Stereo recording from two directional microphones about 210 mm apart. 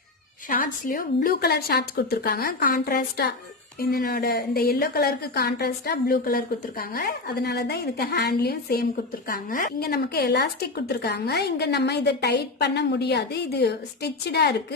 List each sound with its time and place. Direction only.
0.5 s a woman's voice: 40° left (ahead or behind)